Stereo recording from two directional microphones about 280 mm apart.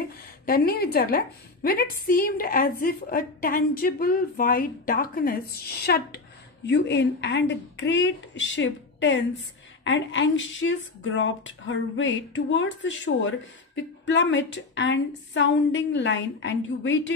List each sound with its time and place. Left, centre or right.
0.5 s a woman's voice: left